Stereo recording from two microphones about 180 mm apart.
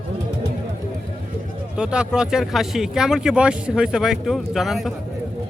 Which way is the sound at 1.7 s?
5° right (ahead or behind).